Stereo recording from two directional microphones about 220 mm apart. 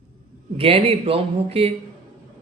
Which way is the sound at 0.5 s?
25° right (ahead or behind).